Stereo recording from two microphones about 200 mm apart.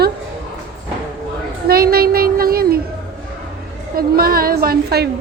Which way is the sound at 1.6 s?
50° right (ahead or behind).